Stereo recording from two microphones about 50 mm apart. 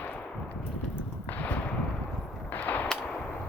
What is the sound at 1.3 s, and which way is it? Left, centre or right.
Gunshot, left.